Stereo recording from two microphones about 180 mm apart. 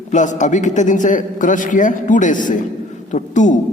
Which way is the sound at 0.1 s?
45° left (ahead or behind).